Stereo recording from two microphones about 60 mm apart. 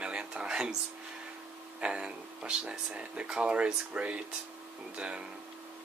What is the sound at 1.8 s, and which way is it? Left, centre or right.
Speech, centre.